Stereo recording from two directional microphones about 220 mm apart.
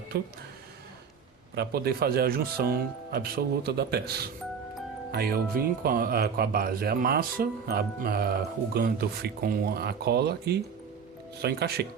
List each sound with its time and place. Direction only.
0.1 s speech: 45° right (ahead or behind)
1.5 s speech: 45° right (ahead or behind)